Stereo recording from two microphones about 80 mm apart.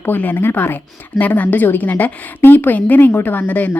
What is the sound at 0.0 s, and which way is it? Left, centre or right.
A woman's voice, left.